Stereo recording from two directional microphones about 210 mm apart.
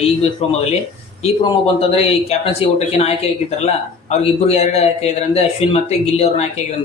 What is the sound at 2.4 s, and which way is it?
Speech, 30° left (ahead or behind).